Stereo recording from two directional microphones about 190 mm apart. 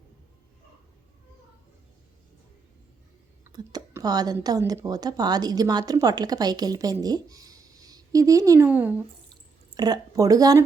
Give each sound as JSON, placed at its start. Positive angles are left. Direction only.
{"t": 3.4, "sound": "speech", "side_deg": -20}
{"t": 9.7, "sound": "speech", "side_deg": -20}